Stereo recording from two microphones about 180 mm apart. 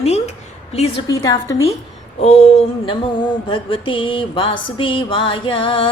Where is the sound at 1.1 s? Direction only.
15° left (ahead or behind).